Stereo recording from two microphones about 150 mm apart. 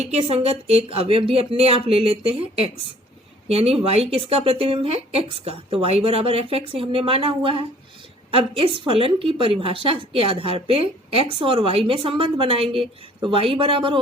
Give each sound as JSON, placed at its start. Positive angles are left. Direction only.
{"t": 0.0, "sound": "speech", "side_deg": -45}